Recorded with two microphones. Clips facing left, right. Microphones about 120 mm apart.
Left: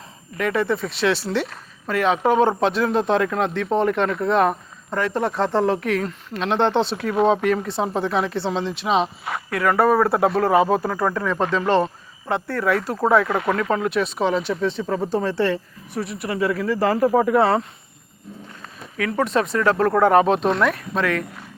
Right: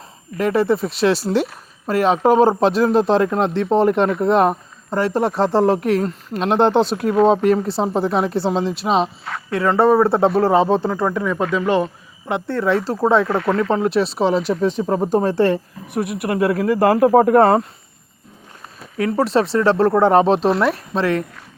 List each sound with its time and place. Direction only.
0.3 s speech: 35° right (ahead or behind)
9.5 s speech: 25° right (ahead or behind)
12.3 s speech: 25° right (ahead or behind)
13.3 s speech: 10° left (ahead or behind)
13.6 s speech: 30° right (ahead or behind); by 17.7 s 50° right (ahead or behind)
18.9 s speech: 35° right (ahead or behind)